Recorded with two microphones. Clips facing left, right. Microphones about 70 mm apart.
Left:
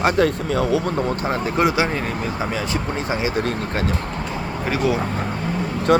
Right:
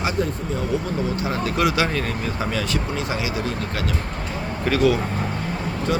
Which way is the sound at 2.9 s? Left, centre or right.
Left.